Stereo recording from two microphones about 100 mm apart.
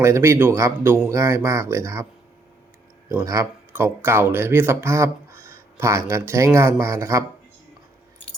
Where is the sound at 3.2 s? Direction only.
35° right (ahead or behind).